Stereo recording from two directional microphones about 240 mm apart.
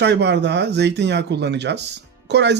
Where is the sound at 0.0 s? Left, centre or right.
Right.